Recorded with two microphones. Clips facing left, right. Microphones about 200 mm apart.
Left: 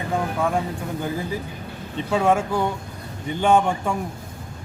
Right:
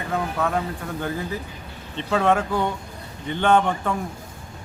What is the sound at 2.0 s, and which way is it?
A man's voice, 10° left (ahead or behind).